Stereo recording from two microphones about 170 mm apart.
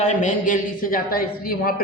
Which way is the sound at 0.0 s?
45° left (ahead or behind).